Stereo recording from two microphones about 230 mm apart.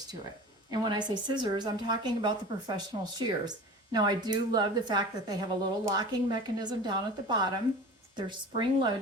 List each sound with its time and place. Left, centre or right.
0.7 s a woman's voice: centre